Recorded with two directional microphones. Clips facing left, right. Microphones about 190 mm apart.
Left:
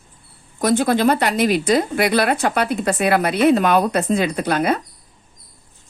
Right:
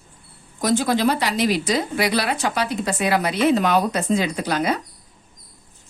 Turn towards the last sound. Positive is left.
turn(degrees=55)  # may be behind; listen again after turning